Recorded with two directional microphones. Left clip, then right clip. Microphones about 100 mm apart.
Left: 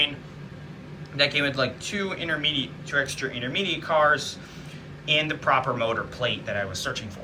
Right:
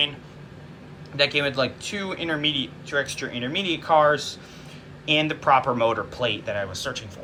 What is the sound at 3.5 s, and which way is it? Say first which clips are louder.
Speech: right 4 dB; 50° right (ahead or behind).